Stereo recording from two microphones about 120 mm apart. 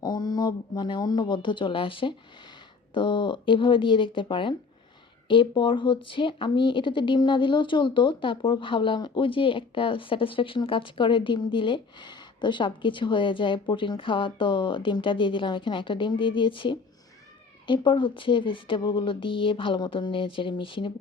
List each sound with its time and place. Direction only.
0.0 s speech: 35° left (ahead or behind)